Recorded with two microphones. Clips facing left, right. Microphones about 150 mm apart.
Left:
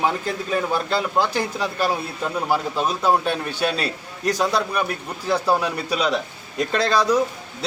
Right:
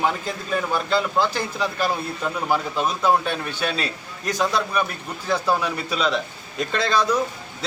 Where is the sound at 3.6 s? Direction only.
35° left (ahead or behind).